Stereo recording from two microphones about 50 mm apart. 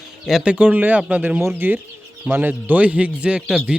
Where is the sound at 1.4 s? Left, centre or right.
Right.